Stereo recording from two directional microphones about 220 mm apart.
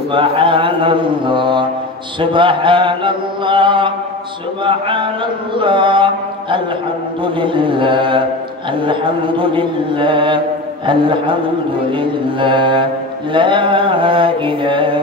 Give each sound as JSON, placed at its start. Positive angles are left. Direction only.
{"t": 0.1, "sound": "chant", "side_deg": -25}